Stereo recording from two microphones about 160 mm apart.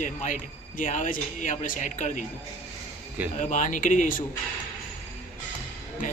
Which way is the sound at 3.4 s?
50° left (ahead or behind).